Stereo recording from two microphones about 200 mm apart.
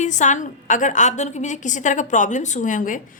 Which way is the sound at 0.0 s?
35° left (ahead or behind).